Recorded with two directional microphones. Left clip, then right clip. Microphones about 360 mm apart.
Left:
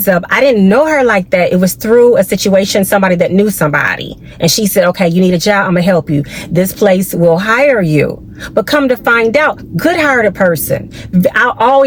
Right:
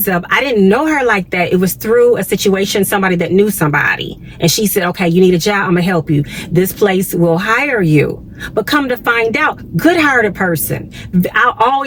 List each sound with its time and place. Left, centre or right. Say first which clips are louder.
0.0 s speech: left 5 dB; centre